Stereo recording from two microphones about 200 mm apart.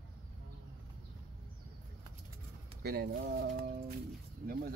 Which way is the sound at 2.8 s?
55° right (ahead or behind).